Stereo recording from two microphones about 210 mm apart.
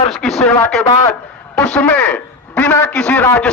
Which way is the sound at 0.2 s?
Centre (ahead or behind).